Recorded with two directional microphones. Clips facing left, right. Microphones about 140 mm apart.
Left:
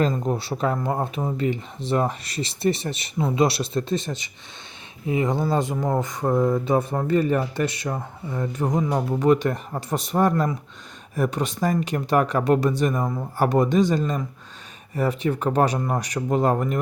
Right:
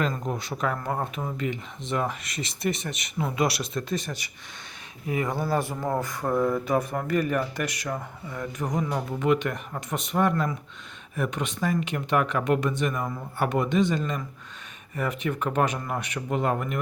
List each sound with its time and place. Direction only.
0.2 s speech: 35° left (ahead or behind)